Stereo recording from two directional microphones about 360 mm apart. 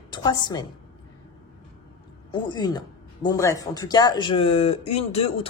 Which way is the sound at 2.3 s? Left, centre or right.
Centre.